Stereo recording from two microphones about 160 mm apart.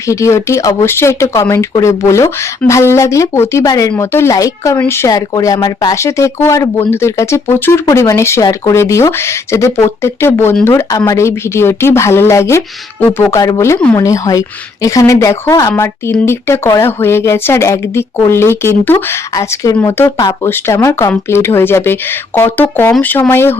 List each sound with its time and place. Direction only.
0.1 s a woman's voice: 20° left (ahead or behind)